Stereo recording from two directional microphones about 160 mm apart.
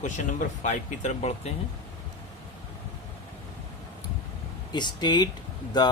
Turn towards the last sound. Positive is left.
turn(degrees=25)  # may be behind; listen again after turning